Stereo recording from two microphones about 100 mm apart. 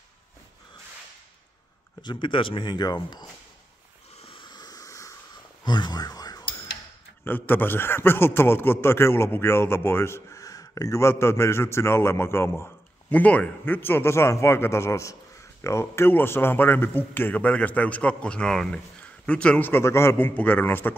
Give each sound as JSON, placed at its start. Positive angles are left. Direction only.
{"t": 2.0, "sound": "speech", "side_deg": 50}
{"t": 4.2, "sound": "a sound", "side_deg": 65}
{"t": 4.5, "sound": "a sound", "side_deg": 40}
{"t": 5.6, "sound": "whispering", "side_deg": 45}
{"t": 7.2, "sound": "a man's voice", "side_deg": 20}
{"t": 13.1, "sound": "a man's voice", "side_deg": 15}
{"t": 19.7, "sound": "a man's voice", "side_deg": 25}